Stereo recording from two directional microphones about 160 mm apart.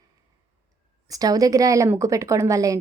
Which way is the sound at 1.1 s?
20° right (ahead or behind).